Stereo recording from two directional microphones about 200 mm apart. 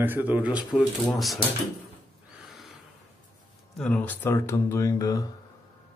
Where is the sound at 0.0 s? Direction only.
10° right (ahead or behind).